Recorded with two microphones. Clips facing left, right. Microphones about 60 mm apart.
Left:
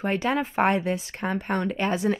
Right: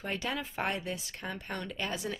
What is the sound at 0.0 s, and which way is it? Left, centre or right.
Speech, left.